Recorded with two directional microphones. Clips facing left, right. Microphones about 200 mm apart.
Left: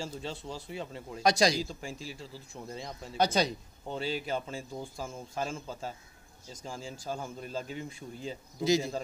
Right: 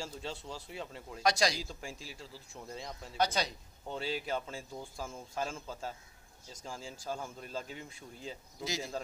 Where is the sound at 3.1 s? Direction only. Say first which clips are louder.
Left 5 dB; 20° left (ahead or behind).